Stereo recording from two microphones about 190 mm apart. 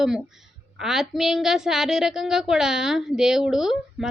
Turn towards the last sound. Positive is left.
turn(degrees=-5)  # may be behind; listen again after turning